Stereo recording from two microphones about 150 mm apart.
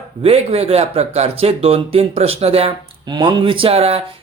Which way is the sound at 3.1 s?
30° right (ahead or behind).